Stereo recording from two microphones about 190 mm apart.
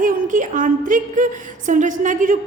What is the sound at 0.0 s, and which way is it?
A woman's voice, 45° right (ahead or behind).